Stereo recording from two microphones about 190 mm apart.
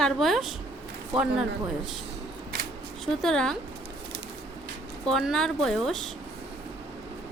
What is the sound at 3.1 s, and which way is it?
Speech, 5° left (ahead or behind).